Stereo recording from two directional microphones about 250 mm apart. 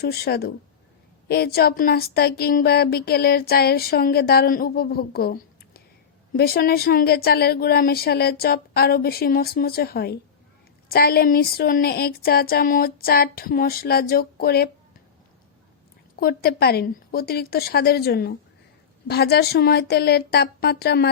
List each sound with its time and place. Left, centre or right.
0.0 s speech: left
16.2 s speech: left